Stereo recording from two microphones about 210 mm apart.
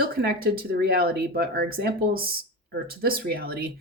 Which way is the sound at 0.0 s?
45° right (ahead or behind).